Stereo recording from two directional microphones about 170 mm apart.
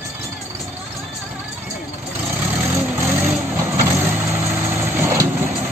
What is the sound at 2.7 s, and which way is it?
Vehicle, 15° right (ahead or behind).